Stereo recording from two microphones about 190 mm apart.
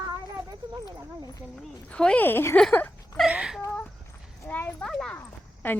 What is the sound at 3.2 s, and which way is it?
Whimper, 5° right (ahead or behind).